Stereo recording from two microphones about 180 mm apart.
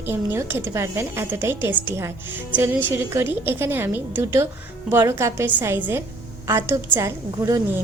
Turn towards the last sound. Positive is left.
turn(degrees=-20)  # may be behind; listen again after turning